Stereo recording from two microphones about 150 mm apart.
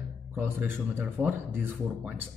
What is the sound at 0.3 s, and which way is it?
A man's voice, 15° right (ahead or behind).